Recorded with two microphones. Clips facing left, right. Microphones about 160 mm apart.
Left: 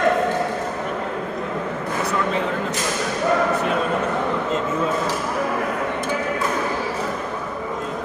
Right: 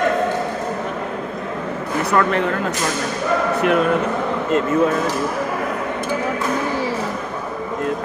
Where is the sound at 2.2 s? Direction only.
65° right (ahead or behind).